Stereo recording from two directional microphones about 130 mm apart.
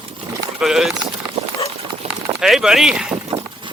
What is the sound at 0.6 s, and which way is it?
Speech, 5° right (ahead or behind).